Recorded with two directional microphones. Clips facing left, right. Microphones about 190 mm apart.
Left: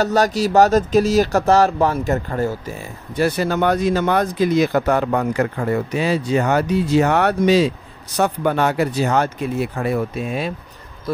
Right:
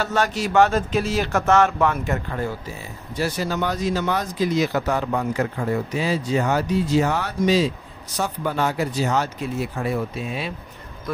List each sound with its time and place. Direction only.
0.0 s speech: 40° left (ahead or behind)
3.2 s speech: 60° left (ahead or behind)